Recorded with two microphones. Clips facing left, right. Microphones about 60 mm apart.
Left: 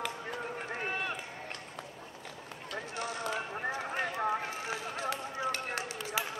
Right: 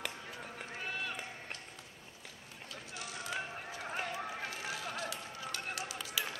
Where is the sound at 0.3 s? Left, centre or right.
Left.